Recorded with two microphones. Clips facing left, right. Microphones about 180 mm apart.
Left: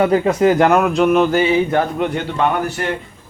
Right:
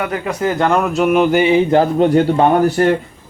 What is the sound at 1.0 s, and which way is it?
Speech, 10° right (ahead or behind).